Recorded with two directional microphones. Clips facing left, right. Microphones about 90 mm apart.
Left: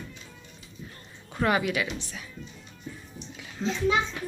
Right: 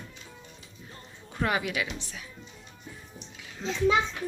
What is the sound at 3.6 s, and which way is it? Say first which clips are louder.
Speech: left 4 dB; 15° left (ahead or behind).